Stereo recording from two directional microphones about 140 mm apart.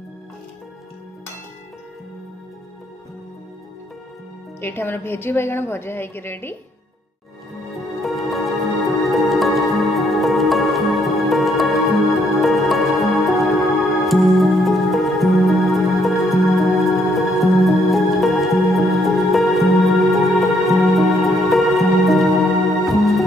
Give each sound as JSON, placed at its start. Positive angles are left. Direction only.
{"t": 4.6, "sound": "a woman's voice", "side_deg": 15}
{"t": 7.7, "sound": "music", "side_deg": 0}